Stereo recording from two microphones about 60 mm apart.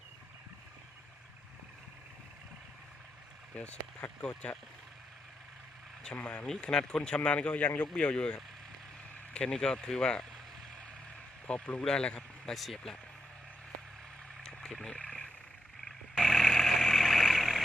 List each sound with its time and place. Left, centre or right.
3.5 s speech: left
6.1 s speech: left
11.4 s speech: left
12.5 s speech: centre
14.4 s vehicle: centre
16.1 s vehicle: centre